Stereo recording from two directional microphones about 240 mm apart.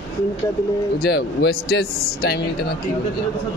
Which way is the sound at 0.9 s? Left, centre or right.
Left.